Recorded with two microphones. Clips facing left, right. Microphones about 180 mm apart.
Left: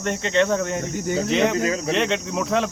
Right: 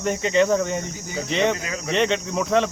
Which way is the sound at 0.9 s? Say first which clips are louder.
Left 9 dB; 55° left (ahead or behind).